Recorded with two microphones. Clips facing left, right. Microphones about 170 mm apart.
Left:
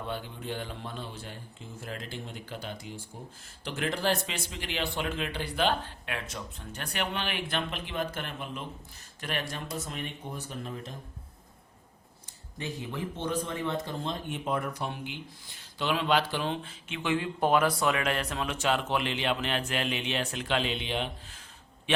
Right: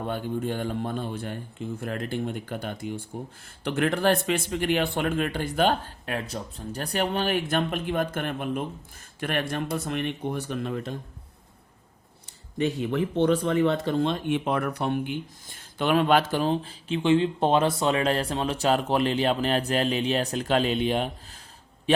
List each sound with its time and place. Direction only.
0.0 s speech: 50° right (ahead or behind); by 10.9 s 75° right (ahead or behind)
12.5 s speech: 65° right (ahead or behind); by 21.1 s 45° right (ahead or behind)